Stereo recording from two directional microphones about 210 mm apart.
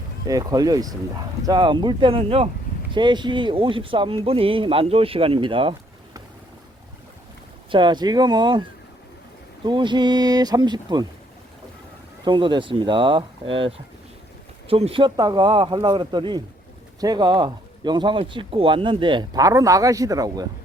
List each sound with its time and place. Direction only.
0.3 s speech: 15° right (ahead or behind)
7.7 s speech: 20° right (ahead or behind)
9.6 s speech: 20° right (ahead or behind)
12.2 s speech: 20° right (ahead or behind)